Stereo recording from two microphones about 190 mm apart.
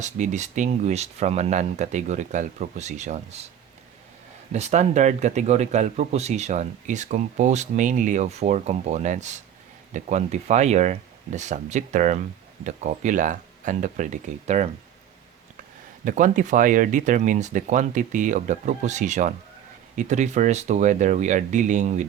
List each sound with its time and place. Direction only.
0.0 s speech: 40° right (ahead or behind)
4.5 s speech: 35° right (ahead or behind)
16.0 s speech: 40° right (ahead or behind)